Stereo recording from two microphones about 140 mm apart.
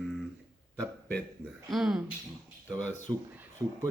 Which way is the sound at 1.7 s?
Centre (ahead or behind).